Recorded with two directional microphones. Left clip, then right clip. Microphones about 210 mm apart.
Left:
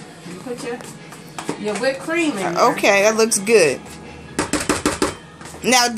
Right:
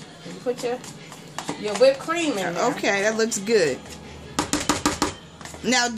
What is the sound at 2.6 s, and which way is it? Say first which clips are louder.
Speech: left 9 dB; centre (ahead or behind).